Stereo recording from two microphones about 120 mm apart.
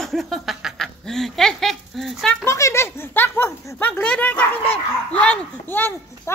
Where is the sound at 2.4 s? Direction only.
25° left (ahead or behind).